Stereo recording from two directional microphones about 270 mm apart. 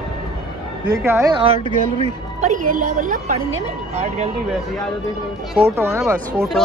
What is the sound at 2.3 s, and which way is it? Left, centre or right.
A woman's voice, right.